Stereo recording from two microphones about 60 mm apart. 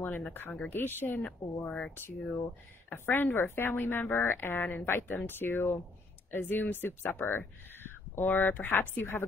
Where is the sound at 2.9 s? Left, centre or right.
Left.